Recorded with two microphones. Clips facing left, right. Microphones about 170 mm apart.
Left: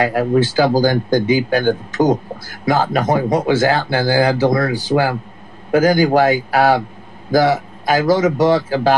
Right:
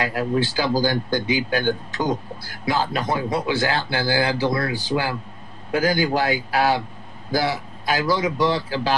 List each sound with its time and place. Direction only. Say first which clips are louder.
0.0 s speech: left 7 dB; 55° left (ahead or behind)